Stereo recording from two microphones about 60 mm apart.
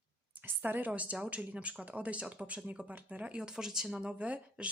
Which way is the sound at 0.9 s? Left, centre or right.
Right.